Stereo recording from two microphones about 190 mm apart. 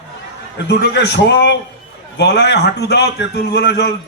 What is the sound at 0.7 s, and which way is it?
A man's voice, 60° left (ahead or behind).